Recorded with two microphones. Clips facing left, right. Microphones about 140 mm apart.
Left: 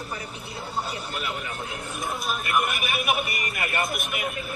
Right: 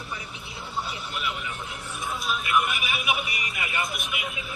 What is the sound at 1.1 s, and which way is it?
Speech, 45° left (ahead or behind).